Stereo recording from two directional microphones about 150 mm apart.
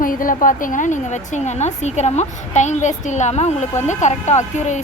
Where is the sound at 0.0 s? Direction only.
65° left (ahead or behind).